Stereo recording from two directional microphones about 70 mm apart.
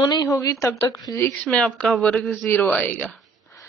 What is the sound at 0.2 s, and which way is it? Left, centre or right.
Speech, left.